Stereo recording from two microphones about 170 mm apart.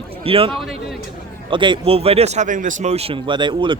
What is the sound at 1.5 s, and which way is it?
Speech, 30° right (ahead or behind).